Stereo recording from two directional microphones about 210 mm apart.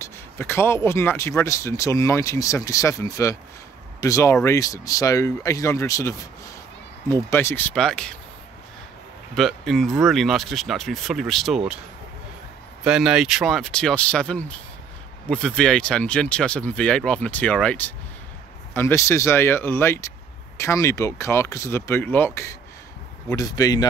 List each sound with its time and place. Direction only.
0.0 s speech: 10° left (ahead or behind)
9.3 s speech: centre (ahead or behind)
12.8 s speech: 5° right (ahead or behind); by 23.9 s 20° left (ahead or behind)